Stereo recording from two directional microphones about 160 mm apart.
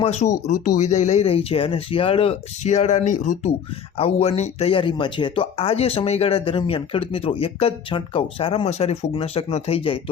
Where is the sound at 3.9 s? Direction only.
40° left (ahead or behind).